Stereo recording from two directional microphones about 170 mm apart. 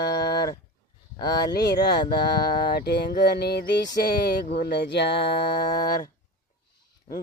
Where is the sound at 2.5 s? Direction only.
65° left (ahead or behind).